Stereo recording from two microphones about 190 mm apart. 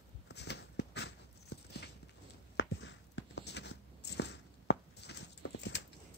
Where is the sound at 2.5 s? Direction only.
75° left (ahead or behind).